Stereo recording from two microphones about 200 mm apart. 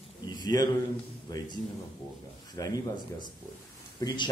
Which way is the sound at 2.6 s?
20° left (ahead or behind).